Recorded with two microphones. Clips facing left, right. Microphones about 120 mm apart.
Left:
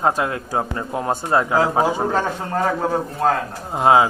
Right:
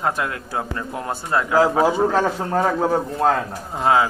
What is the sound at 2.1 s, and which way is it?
Speech, centre (ahead or behind).